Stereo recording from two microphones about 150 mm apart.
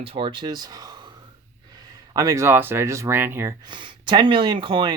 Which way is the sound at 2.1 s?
20° right (ahead or behind).